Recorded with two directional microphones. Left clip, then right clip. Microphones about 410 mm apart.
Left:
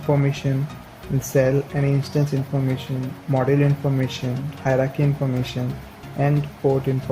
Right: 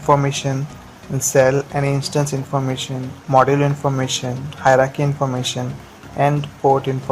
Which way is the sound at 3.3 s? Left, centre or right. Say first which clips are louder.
Right 7 dB; right.